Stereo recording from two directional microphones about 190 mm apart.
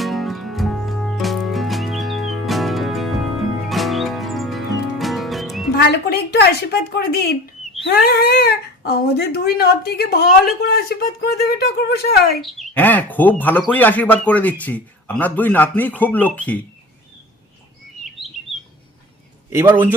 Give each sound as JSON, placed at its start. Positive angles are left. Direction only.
{"t": 0.0, "sound": "music", "side_deg": 0}
{"t": 5.7, "sound": "speech", "side_deg": 60}
{"t": 12.4, "sound": "speech", "side_deg": 10}
{"t": 19.5, "sound": "a man's voice", "side_deg": -10}